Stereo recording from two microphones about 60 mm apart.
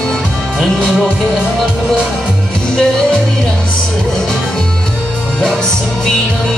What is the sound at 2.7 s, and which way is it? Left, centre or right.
Music, centre.